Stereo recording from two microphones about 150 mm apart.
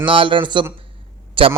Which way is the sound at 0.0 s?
35° right (ahead or behind).